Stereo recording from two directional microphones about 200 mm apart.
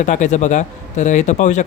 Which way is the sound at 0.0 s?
35° left (ahead or behind).